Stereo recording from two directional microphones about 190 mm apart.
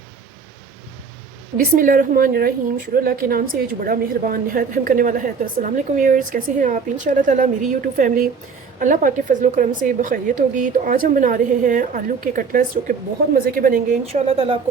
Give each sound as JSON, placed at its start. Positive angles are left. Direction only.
{"t": 1.5, "sound": "a woman's voice", "side_deg": -45}
{"t": 14.1, "sound": "speech", "side_deg": -30}